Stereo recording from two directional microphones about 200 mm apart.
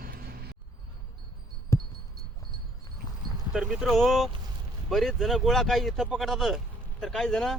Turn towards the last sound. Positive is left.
turn(degrees=5)  # may be behind; listen again after turning